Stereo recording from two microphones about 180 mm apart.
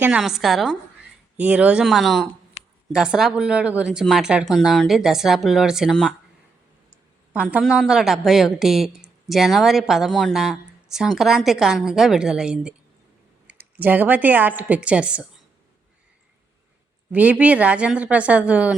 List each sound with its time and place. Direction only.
0.0 s a woman's voice: 5° right (ahead or behind)
2.6 s a sound: 35° left (ahead or behind)
2.9 s a woman's voice: 5° right (ahead or behind)
7.3 s a woman's voice: 5° right (ahead or behind)
17.1 s speech: 10° right (ahead or behind)